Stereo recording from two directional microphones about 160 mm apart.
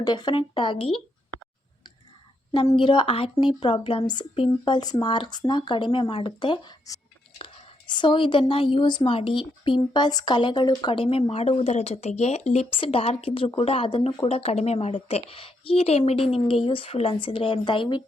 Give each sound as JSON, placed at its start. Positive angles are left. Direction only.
{"t": 0.0, "sound": "a woman's voice", "side_deg": 25}
{"t": 2.5, "sound": "a woman's voice", "side_deg": 30}
{"t": 14.3, "sound": "a woman's voice", "side_deg": 40}